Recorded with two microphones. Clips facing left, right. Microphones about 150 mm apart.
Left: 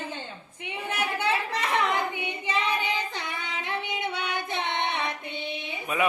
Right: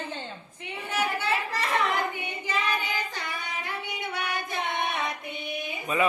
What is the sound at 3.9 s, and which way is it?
Singing, 25° left (ahead or behind).